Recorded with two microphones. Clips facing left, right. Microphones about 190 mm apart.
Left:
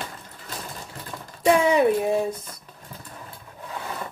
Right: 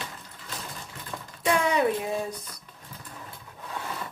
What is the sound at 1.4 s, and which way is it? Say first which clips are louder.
Speech: left 6 dB; 25° left (ahead or behind).